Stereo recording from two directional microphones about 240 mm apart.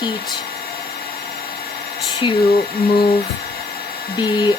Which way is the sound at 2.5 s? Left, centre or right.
Left.